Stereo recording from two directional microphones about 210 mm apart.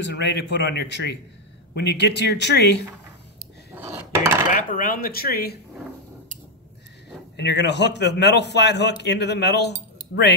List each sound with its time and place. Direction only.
0.0 s a man's voice: 55° left (ahead or behind)
3.7 s dishes: 10° right (ahead or behind)
4.5 s a man's voice: 40° left (ahead or behind)
7.3 s a man's voice: 55° left (ahead or behind)